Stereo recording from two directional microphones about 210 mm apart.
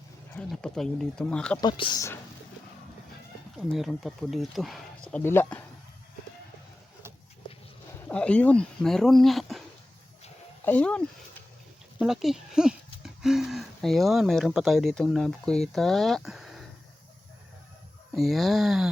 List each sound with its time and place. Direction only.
0.3 s speech: 5° left (ahead or behind)
1.6 s speech: 20° left (ahead or behind)
3.7 s speech: centre (ahead or behind)
8.0 s speech: 5° left (ahead or behind)
10.7 s speech: 5° left (ahead or behind)
18.1 s speech: centre (ahead or behind)